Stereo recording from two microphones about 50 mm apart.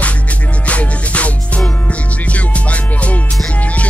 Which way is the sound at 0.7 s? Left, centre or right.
Left.